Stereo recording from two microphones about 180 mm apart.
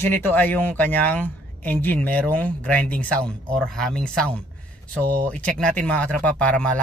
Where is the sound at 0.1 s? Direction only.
10° left (ahead or behind).